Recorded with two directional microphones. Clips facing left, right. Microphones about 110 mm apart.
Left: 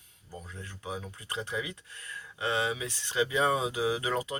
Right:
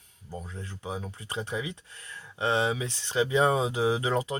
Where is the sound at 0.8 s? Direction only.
25° right (ahead or behind).